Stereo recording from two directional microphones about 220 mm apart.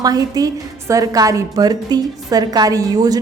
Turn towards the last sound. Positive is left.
turn(degrees=-15)  # may be behind; listen again after turning